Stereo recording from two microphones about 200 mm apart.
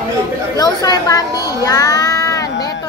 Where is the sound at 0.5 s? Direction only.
20° left (ahead or behind).